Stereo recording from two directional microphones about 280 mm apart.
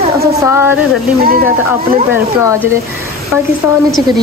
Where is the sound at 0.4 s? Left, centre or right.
Centre.